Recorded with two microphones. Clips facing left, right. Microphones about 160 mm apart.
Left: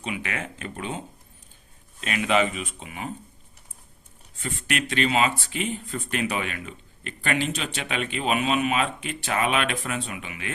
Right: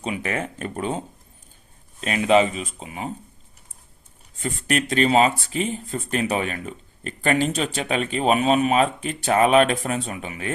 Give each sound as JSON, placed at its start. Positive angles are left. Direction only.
{"t": 0.0, "sound": "speech", "side_deg": -35}
{"t": 4.4, "sound": "speech", "side_deg": -40}